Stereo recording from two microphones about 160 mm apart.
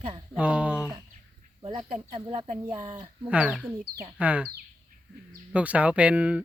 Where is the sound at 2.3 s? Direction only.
40° right (ahead or behind).